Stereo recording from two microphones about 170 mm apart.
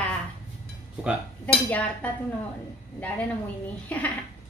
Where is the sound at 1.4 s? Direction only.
10° left (ahead or behind).